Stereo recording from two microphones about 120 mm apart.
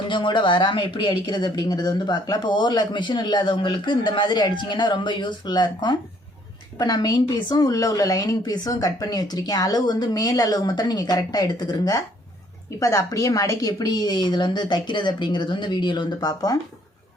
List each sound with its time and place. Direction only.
0.1 s speech: 40° left (ahead or behind)